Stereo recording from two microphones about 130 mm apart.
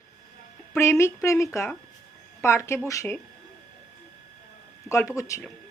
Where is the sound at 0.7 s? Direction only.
20° left (ahead or behind).